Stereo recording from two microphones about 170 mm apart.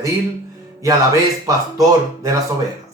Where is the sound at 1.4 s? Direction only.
20° right (ahead or behind).